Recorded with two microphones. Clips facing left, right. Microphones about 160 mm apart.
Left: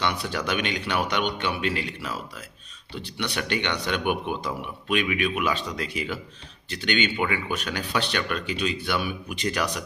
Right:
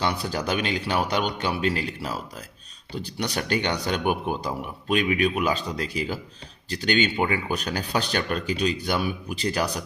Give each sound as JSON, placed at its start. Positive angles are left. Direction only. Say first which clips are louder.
{"t": 0.0, "sound": "speech", "louder": "right 1 dB", "side_deg": -35}